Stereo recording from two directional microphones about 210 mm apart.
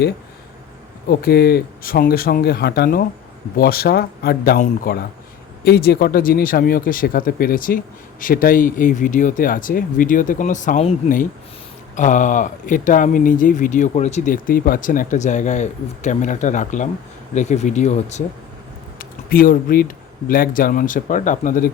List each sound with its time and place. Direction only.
1.1 s speech: 45° left (ahead or behind)
18.9 s a sound: 45° left (ahead or behind)
20.2 s speech: 40° left (ahead or behind)